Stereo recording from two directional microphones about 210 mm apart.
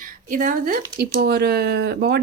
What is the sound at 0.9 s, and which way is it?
A woman's voice, 50° right (ahead or behind).